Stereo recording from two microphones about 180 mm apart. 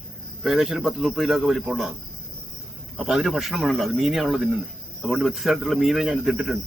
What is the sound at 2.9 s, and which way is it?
Speech, centre (ahead or behind).